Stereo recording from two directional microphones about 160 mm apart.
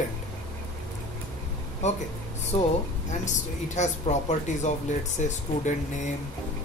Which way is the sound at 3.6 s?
45° left (ahead or behind).